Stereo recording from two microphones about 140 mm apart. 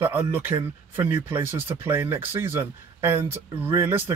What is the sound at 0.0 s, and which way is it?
Speech, 15° right (ahead or behind).